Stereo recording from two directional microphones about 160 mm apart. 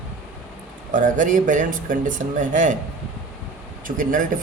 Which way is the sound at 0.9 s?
55° right (ahead or behind).